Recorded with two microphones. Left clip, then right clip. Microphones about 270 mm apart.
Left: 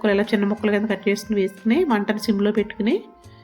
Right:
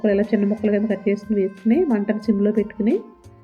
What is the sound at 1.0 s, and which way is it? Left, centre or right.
Speech, left.